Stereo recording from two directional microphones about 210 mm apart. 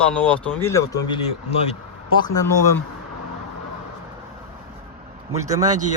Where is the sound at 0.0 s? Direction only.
5° left (ahead or behind).